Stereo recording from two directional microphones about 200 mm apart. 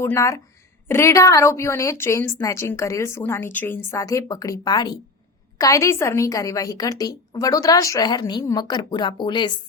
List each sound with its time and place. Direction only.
0.0 s a woman's voice: 15° left (ahead or behind)